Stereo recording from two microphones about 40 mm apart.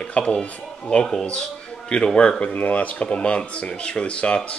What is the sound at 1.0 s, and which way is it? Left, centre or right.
Speech, centre.